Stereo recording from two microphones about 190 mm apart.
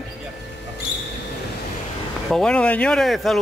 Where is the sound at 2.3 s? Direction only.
5° left (ahead or behind).